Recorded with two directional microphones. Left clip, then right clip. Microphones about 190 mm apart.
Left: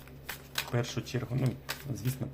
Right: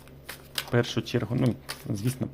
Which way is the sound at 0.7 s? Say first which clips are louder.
Right 8 dB; 35° right (ahead or behind).